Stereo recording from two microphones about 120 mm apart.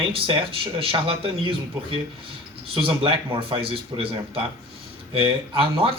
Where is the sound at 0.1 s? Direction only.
50° right (ahead or behind).